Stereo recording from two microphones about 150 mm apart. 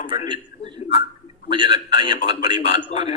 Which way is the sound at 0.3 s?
30° right (ahead or behind).